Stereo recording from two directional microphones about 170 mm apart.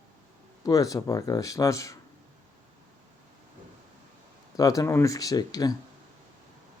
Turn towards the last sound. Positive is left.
turn(degrees=20)  # may be behind; listen again after turning